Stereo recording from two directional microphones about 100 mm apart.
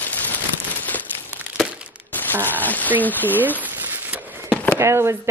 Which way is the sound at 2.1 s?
20° left (ahead or behind).